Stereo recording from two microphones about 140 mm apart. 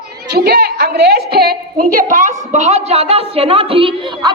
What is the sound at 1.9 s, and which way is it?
A woman's voice, 70° right (ahead or behind).